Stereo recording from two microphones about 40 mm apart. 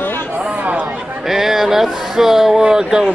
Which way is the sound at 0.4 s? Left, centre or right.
Right.